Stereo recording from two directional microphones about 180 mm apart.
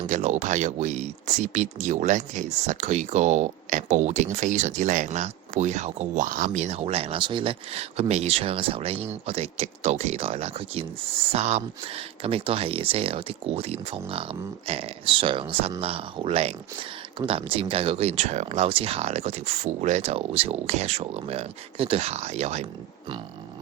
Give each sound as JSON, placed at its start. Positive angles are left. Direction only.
{"t": 0.1, "sound": "speech", "side_deg": -40}